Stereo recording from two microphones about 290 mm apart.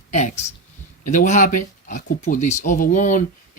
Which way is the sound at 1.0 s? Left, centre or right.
Left.